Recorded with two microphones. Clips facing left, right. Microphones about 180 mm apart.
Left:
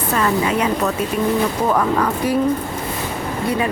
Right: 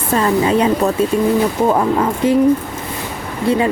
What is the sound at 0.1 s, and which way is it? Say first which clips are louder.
Speech: right 5 dB; 30° right (ahead or behind).